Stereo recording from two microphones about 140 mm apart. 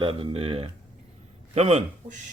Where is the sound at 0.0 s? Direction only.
40° right (ahead or behind).